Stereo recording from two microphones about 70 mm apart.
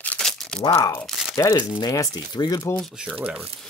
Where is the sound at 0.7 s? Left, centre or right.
Left.